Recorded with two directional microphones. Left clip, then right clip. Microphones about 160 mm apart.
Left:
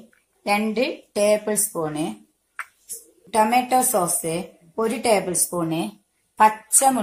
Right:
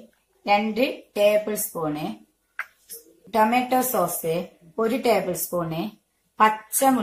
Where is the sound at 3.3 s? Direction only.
45° left (ahead or behind).